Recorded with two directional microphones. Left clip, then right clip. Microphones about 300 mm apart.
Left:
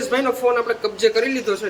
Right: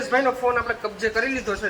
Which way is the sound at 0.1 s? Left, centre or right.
Centre.